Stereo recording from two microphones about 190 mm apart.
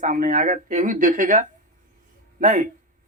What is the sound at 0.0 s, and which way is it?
A man's voice, 45° right (ahead or behind).